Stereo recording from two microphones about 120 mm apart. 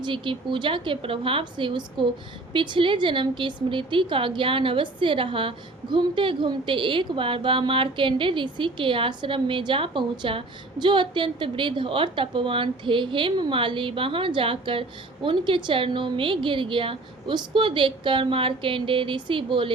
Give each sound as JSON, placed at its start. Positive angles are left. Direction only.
{"t": 0.0, "sound": "a woman's voice", "side_deg": -45}